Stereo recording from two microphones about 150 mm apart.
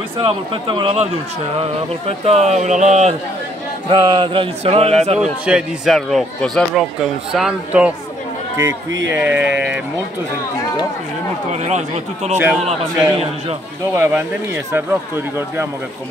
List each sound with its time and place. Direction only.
0.2 s a sound: 30° right (ahead or behind)
1.6 s speech: 45° right (ahead or behind)
3.9 s a sound: 30° right (ahead or behind)
5.0 s speech: 45° right (ahead or behind)
5.4 s a man's voice: 5° right (ahead or behind)
8.5 s a man's voice: 20° right (ahead or behind)
11.5 s speech: 45° right (ahead or behind)
13.9 s speech: 15° right (ahead or behind)